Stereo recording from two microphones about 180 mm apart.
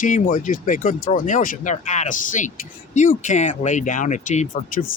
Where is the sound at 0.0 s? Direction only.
50° left (ahead or behind).